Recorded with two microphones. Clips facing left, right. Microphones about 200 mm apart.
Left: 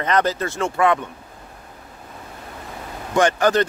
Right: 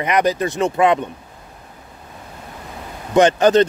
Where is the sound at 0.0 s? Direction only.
15° right (ahead or behind).